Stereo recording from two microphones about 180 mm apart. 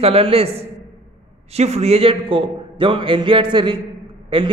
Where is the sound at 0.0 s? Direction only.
35° right (ahead or behind).